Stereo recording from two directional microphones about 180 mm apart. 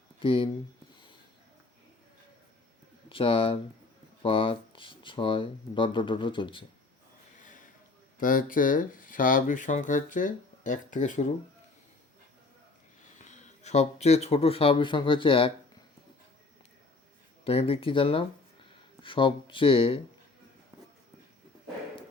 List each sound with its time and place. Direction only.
0.2 s speech: 30° left (ahead or behind)
3.1 s speech: 30° left (ahead or behind)
8.2 s speech: 50° left (ahead or behind)
13.2 s speech: 40° left (ahead or behind)
17.4 s speech: 35° left (ahead or behind)